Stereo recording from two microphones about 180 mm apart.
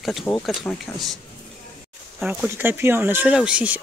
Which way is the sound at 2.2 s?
10° right (ahead or behind).